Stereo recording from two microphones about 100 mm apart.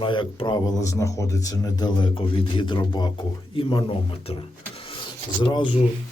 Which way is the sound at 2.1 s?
55° left (ahead or behind).